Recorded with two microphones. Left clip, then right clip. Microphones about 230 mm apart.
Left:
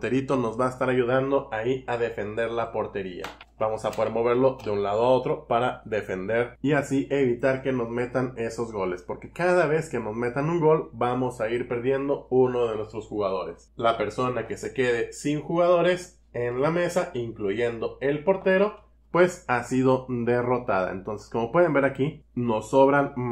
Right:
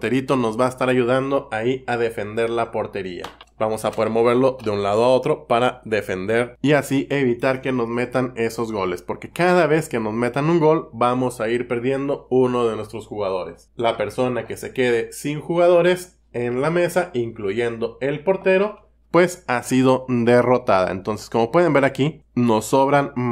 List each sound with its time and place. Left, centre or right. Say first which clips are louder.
0.0 s speech: right 5 dB; right
13.7 s speech: right 3 dB; right